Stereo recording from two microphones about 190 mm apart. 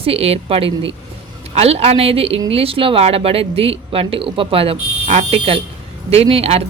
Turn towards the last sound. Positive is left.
turn(degrees=-30)  # may be behind; listen again after turning